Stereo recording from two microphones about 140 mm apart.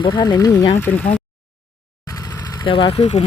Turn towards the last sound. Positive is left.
turn(degrees=45)  # may be behind; listen again after turning